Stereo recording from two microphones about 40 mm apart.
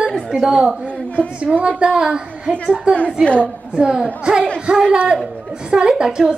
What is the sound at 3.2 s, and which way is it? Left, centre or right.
Speech, left.